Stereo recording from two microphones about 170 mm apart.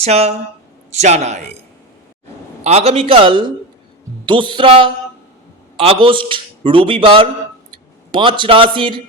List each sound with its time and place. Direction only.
0.0 s a man's voice: 40° right (ahead or behind)
2.6 s a man's voice: 40° right (ahead or behind)